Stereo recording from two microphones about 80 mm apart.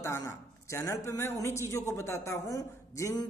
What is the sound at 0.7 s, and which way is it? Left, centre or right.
A woman's voice, left.